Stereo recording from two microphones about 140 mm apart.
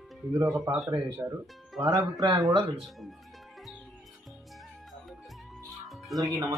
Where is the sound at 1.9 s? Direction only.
30° right (ahead or behind).